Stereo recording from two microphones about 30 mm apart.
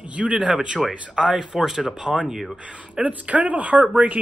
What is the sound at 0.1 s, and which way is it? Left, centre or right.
Speech, right.